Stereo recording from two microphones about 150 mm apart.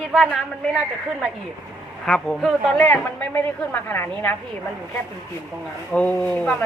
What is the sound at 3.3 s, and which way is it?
A woman's voice, 15° left (ahead or behind).